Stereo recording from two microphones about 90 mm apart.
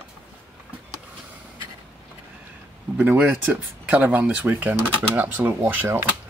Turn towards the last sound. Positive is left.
turn(degrees=-25)  # may be behind; listen again after turning